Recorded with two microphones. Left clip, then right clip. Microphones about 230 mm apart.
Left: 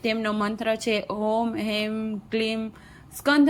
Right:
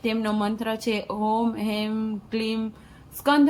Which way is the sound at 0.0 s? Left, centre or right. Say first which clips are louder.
Even; centre.